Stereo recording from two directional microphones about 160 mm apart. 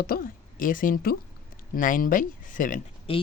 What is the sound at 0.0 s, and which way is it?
A woman's voice, 65° left (ahead or behind).